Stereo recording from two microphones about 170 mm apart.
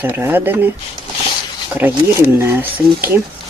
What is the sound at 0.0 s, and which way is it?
Speech, 10° right (ahead or behind).